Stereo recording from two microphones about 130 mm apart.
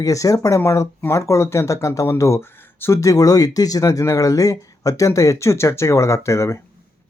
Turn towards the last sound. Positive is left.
turn(degrees=20)  # may be behind; listen again after turning